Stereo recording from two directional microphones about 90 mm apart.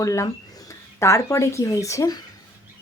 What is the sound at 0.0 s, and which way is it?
Speech, 35° left (ahead or behind).